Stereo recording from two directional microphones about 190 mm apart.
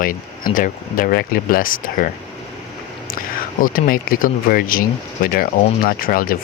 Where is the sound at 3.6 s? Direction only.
50° left (ahead or behind).